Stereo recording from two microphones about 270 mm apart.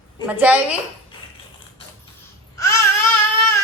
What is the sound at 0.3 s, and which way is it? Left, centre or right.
Speech, centre.